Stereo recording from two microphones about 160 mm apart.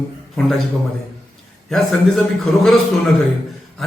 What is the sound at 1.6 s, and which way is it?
A man's voice, centre (ahead or behind).